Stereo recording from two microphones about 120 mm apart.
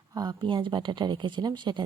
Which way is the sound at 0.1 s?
35° right (ahead or behind).